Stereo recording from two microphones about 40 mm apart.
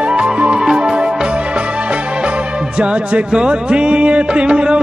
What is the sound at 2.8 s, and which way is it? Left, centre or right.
Music, right.